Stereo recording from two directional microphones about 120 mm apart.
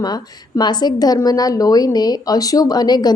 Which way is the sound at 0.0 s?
35° left (ahead or behind).